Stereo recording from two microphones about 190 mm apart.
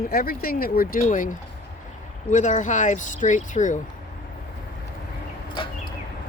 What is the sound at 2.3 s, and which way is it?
Speech, 40° left (ahead or behind).